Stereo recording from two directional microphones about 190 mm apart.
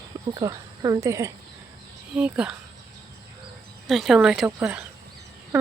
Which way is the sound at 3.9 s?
Centre (ahead or behind).